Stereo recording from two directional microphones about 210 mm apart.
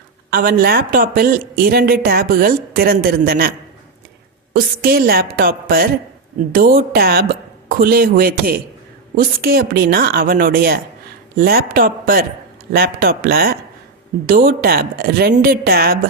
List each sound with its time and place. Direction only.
0.3 s speech: 45° right (ahead or behind)
4.8 s speech: 45° right (ahead or behind)